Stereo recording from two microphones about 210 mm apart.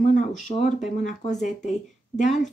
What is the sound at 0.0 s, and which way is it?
Speech, 35° left (ahead or behind).